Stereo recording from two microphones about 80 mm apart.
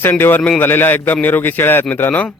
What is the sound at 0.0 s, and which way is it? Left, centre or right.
Speech, left.